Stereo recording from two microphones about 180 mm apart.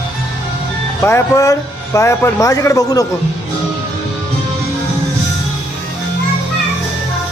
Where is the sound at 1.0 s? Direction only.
15° left (ahead or behind).